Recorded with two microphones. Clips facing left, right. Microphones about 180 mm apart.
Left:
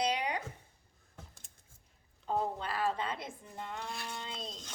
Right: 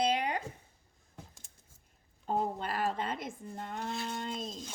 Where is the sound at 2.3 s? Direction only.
45° right (ahead or behind).